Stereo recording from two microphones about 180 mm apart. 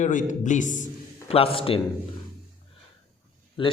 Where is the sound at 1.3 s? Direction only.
30° left (ahead or behind).